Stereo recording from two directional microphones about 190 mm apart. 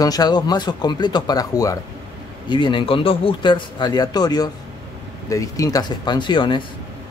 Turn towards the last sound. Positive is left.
turn(degrees=25)  # may be behind; listen again after turning